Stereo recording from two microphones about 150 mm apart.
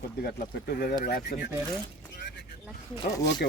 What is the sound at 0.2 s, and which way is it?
Speech, 70° left (ahead or behind).